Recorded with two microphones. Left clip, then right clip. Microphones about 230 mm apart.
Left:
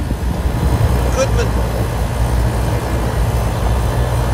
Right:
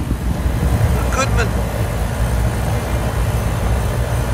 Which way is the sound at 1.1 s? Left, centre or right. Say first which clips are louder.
Left 1 dB; centre.